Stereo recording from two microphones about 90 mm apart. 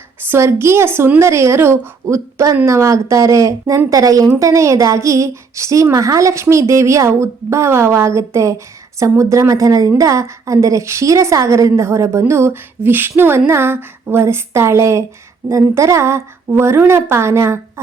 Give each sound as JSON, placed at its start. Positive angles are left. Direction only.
{"t": 0.3, "sound": "speech", "side_deg": -30}